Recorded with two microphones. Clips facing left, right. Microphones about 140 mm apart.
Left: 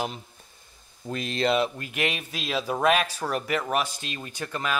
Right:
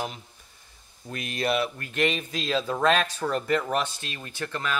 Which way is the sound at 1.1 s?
30° left (ahead or behind).